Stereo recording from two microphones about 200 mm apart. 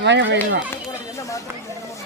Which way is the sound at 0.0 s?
60° right (ahead or behind).